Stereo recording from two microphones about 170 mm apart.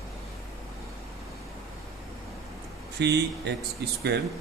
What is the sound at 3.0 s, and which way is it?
Speech, 85° right.